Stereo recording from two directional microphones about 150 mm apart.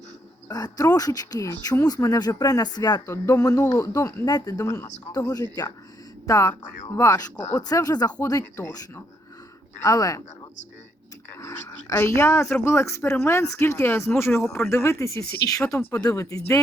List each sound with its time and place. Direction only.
0.4 s speech: 25° left (ahead or behind)
11.3 s speech: 20° left (ahead or behind)